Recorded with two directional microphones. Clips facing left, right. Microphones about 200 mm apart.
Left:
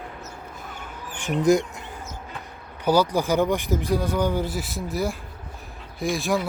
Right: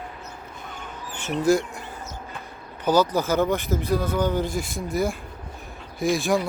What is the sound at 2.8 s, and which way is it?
Speech, 10° left (ahead or behind).